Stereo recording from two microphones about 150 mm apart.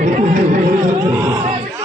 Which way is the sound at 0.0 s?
55° right (ahead or behind).